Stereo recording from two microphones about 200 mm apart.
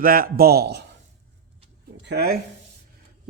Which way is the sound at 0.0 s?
45° right (ahead or behind).